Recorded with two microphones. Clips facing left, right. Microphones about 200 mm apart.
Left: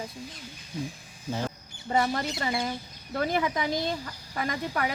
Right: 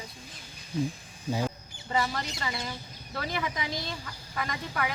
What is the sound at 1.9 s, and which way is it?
Speech, 45° left (ahead or behind).